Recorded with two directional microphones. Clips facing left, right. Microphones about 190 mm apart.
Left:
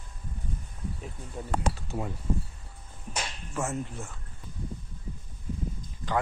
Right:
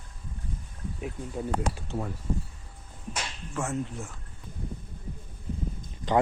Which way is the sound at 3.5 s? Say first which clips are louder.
Right 1 dB; 5° left (ahead or behind).